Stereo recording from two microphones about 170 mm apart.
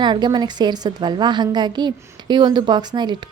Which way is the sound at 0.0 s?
25° right (ahead or behind).